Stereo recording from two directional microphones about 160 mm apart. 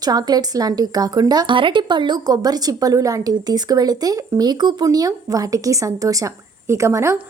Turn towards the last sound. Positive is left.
turn(degrees=-20)  # may be behind; listen again after turning